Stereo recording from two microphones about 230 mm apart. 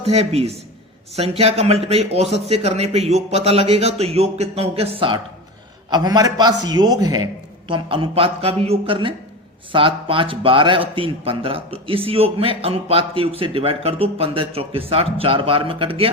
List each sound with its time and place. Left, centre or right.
0.0 s a man's voice: right